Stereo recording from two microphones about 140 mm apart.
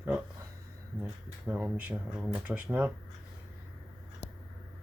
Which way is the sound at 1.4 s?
10° right (ahead or behind).